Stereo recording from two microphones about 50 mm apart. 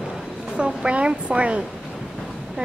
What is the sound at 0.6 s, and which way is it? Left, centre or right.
Speech, right.